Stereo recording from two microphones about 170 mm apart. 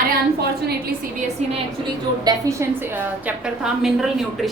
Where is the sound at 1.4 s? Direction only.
40° right (ahead or behind).